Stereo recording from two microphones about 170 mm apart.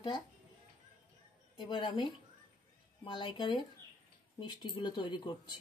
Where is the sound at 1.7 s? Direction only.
25° left (ahead or behind).